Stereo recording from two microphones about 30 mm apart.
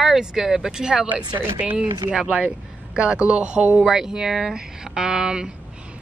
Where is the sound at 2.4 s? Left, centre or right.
Right.